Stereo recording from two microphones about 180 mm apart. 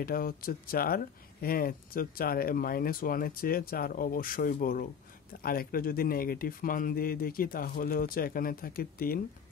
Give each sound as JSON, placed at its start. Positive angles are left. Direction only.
{"t": 0.0, "sound": "speech", "side_deg": 55}